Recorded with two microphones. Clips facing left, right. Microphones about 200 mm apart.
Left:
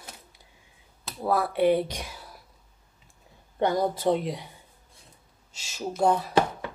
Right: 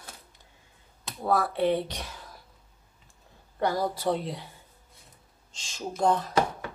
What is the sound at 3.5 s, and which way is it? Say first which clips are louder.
Speech: left 3 dB; 20° left (ahead or behind).